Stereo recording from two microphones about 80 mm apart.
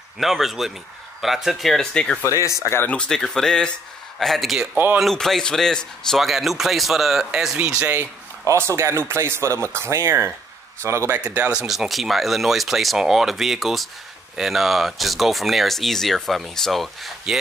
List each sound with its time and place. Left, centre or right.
0.2 s speech: centre
2.4 s speech: left
2.9 s speech: centre
7.5 s speech: centre
8.5 s speech: right
11.1 s speech: centre
11.6 s speech: centre